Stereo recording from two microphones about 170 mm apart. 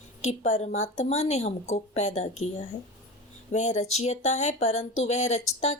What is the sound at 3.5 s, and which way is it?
A woman's voice, 40° left (ahead or behind).